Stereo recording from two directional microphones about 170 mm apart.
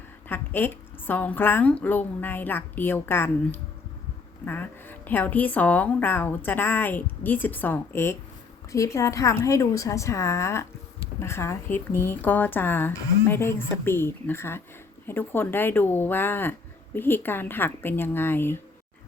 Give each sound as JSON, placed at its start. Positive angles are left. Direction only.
{"t": 0.3, "sound": "a woman's voice", "side_deg": 10}